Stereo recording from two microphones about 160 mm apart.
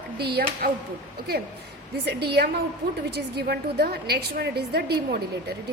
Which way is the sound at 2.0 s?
90° right.